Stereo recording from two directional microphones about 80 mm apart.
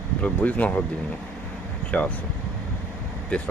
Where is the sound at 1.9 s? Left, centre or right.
Centre.